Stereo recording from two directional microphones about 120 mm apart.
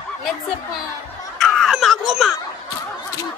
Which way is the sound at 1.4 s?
Centre (ahead or behind).